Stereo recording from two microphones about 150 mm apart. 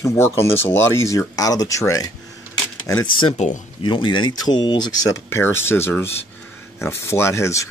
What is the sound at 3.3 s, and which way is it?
Speech, 55° left (ahead or behind).